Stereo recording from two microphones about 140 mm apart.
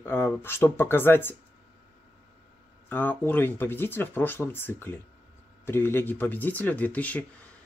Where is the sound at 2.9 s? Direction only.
15° left (ahead or behind).